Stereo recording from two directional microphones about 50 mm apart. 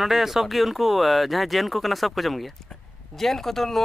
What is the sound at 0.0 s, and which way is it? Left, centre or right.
Speech, centre.